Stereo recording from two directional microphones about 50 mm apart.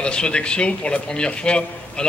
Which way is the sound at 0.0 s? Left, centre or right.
Centre.